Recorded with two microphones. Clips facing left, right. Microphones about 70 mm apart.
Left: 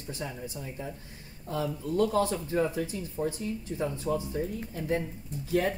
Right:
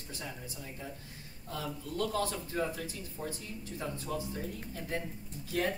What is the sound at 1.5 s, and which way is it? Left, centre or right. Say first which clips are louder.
Speech: left 8 dB; left.